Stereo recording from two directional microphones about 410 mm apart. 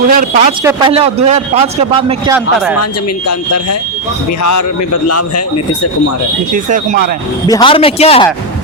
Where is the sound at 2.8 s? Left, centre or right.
Left.